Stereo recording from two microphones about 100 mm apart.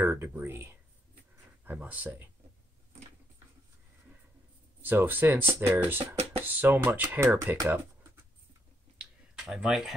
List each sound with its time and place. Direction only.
0.1 s speech: 20° right (ahead or behind)
4.8 s speech: 20° right (ahead or behind)
9.3 s speech: 5° right (ahead or behind)